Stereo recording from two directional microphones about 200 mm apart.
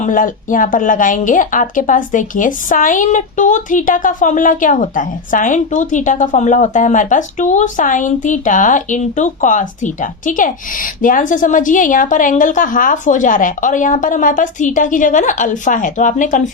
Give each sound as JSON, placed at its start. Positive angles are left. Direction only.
{"t": 0.0, "sound": "a woman's voice", "side_deg": 40}